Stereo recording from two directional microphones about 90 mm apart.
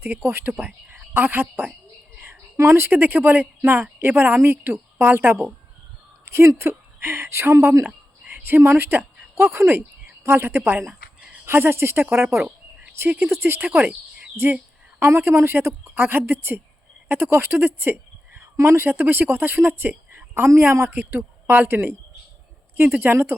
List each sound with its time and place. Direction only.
0.0 s a woman's voice: 25° right (ahead or behind)